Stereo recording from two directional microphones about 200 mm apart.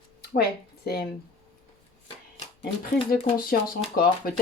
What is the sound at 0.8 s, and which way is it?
Speech, 55° left (ahead or behind).